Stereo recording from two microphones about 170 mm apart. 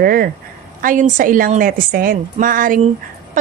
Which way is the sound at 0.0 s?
55° right (ahead or behind).